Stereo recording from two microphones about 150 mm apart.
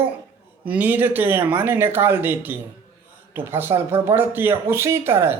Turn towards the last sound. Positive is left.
turn(degrees=-15)  # may be behind; listen again after turning